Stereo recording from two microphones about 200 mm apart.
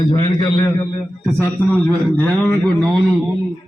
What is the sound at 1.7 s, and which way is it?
Speech, 5° left (ahead or behind).